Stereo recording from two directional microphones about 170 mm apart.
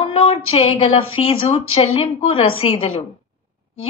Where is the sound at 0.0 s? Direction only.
35° left (ahead or behind).